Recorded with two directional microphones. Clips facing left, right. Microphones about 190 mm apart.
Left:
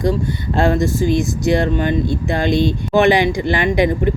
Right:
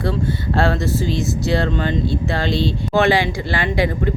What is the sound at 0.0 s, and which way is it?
Speech, 15° left (ahead or behind).